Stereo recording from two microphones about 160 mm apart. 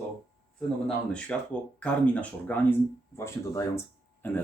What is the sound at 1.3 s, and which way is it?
Speech, 10° left (ahead or behind).